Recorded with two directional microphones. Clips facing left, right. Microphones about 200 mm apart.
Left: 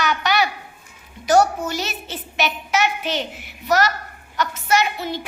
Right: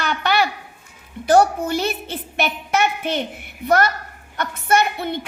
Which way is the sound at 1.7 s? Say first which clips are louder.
Right 5 dB; 55° right (ahead or behind).